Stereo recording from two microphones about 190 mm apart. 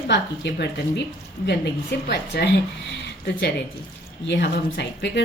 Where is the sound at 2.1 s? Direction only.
60° left (ahead or behind).